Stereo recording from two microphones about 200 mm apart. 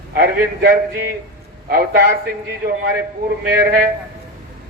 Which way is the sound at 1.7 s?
45° right (ahead or behind).